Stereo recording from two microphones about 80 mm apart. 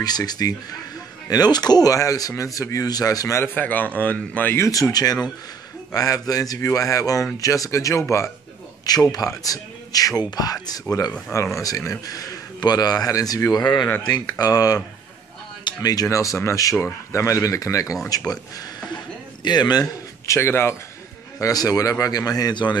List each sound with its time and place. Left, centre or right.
0.0 s speech: left
3.4 s a man's voice: left
4.6 s speech: left
8.8 s speech: left
19.4 s speech: left
20.2 s speech: left
21.4 s speech: left